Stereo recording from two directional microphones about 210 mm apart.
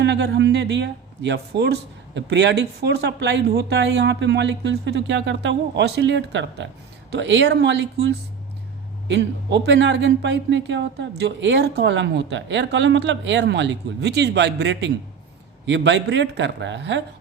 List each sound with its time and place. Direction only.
0.0 s speech: 55° right (ahead or behind)
9.0 s speech: 55° right (ahead or behind)